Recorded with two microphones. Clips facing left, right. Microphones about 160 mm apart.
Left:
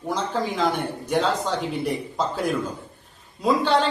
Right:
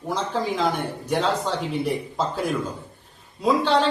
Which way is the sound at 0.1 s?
Centre (ahead or behind).